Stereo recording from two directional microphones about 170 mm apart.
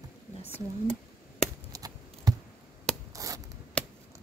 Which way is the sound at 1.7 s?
20° right (ahead or behind).